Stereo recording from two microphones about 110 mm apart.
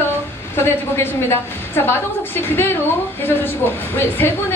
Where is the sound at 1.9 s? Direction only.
20° left (ahead or behind).